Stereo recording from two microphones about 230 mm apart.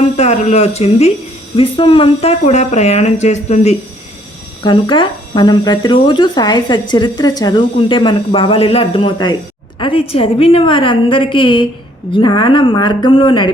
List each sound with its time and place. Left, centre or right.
0.2 s speech: left